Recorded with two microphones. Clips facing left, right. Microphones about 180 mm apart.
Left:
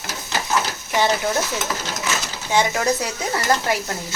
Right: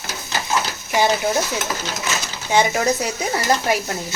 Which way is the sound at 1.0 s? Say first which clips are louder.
Right 2 dB; 20° right (ahead or behind).